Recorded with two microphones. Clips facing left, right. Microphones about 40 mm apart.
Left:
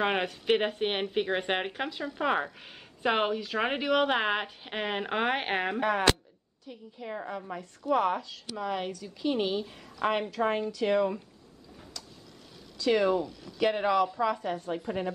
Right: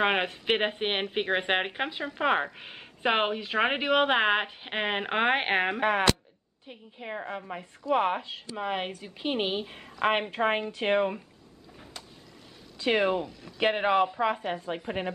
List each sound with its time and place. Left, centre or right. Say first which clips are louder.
0.0 s a woman's voice: right 2 dB; right
12.7 s a woman's voice: even; right